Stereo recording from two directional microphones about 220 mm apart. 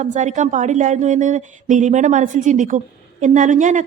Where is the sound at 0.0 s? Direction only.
35° right (ahead or behind).